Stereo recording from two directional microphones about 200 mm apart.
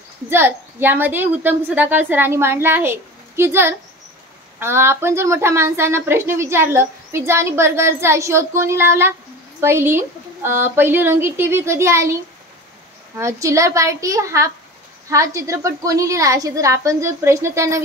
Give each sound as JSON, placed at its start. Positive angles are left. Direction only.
{"t": 0.3, "sound": "a woman's voice", "side_deg": -10}
{"t": 13.2, "sound": "a woman's voice", "side_deg": -15}